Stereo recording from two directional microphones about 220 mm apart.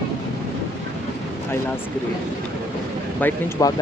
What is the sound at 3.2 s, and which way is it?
Speech, 15° left (ahead or behind).